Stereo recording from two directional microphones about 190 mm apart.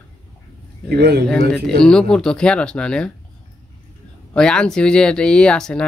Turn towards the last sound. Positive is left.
turn(degrees=5)  # may be behind; listen again after turning